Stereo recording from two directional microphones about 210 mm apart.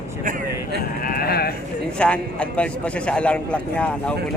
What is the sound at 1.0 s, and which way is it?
Speech, 45° left (ahead or behind).